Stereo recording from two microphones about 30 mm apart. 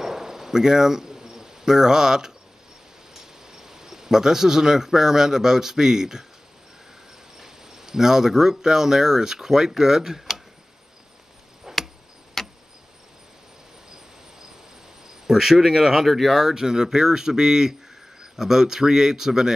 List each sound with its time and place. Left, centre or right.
0.0 s cricket: centre
3.4 s speech: centre
7.3 s speech: centre
11.7 s chop: centre
12.4 s tick-tock: centre
15.2 s cricket: centre
15.6 s speech: centre
16.3 s speech: centre